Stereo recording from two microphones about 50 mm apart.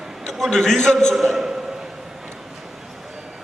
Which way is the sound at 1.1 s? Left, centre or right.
Centre.